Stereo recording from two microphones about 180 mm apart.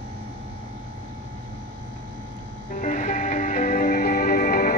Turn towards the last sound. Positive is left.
turn(degrees=50)  # may be behind; listen again after turning